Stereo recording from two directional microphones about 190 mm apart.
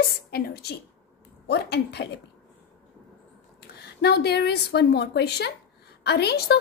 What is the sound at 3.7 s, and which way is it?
A woman's voice, 60° left (ahead or behind).